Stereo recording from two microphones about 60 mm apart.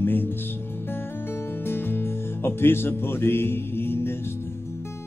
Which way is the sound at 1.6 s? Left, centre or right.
Left.